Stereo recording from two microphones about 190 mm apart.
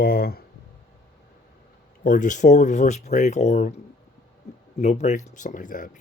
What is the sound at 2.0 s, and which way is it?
Speech, 45° left (ahead or behind).